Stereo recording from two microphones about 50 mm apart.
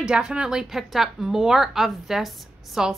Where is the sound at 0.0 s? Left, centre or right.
Centre.